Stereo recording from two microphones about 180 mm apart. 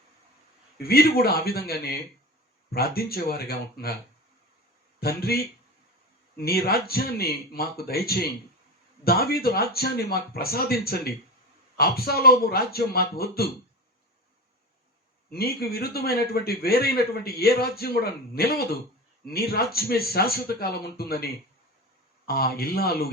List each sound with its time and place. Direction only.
0.8 s a man's voice: 60° left (ahead or behind)
4.9 s a man's voice: 60° left (ahead or behind)
15.3 s a man's voice: 60° left (ahead or behind)
22.3 s a man's voice: 60° left (ahead or behind)